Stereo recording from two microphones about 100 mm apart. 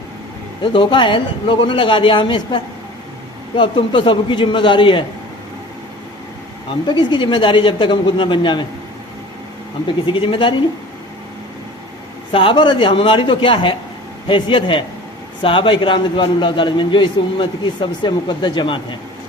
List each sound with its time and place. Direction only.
0.6 s speech: 55° left (ahead or behind)
3.6 s speech: 55° left (ahead or behind)
6.8 s speech: 50° left (ahead or behind)
10.1 s speech: 60° left (ahead or behind)
12.3 s a man's voice: 60° left (ahead or behind)